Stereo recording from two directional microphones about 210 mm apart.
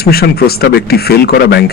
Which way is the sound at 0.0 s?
50° left (ahead or behind).